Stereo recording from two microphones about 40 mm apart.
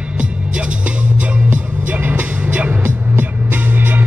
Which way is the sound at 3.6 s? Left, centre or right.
Right.